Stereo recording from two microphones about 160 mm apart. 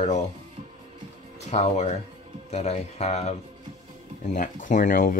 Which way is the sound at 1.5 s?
45° left (ahead or behind).